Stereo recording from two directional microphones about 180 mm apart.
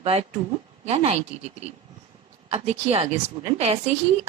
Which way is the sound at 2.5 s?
35° right (ahead or behind).